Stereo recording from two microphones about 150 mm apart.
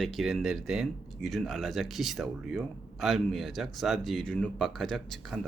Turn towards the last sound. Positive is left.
turn(degrees=0)  # may be behind; listen again after turning